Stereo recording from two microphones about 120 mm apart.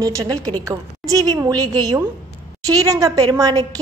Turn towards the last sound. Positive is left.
turn(degrees=-30)  # may be behind; listen again after turning